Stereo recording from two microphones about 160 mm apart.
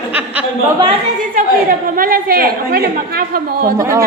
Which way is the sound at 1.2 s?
60° right (ahead or behind).